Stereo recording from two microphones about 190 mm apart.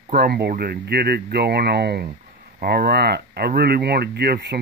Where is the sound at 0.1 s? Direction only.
55° right (ahead or behind).